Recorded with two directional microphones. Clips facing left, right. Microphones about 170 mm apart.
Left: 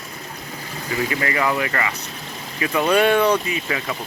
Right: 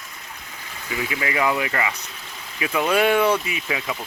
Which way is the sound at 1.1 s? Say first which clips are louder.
Right 1 dB; 10° right (ahead or behind).